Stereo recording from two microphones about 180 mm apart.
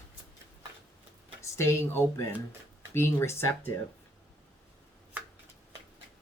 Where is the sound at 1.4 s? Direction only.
15° left (ahead or behind).